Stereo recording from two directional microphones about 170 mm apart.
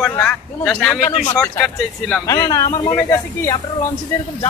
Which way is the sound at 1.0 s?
40° left (ahead or behind).